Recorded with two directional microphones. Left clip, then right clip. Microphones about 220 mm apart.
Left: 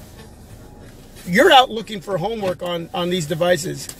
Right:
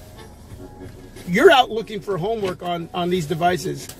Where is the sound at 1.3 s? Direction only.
20° left (ahead or behind).